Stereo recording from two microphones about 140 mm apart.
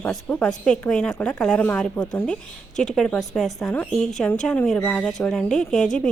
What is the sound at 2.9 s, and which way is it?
A woman's voice, 5° left (ahead or behind).